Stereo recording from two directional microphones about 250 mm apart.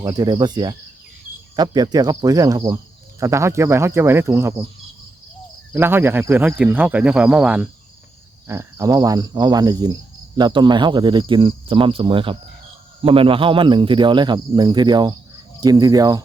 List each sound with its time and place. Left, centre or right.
0.0 s speech: centre
5.7 s speech: centre